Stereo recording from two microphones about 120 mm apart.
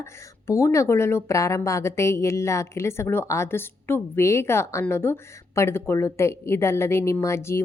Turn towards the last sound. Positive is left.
turn(degrees=20)  # may be behind; listen again after turning